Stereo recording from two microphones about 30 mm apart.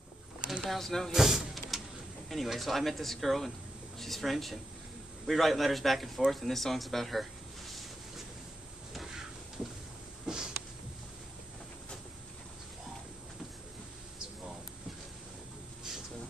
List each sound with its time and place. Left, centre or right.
0.7 s speech: centre
1.1 s vehicle: centre
2.2 s speech: centre
10.2 s a sound: right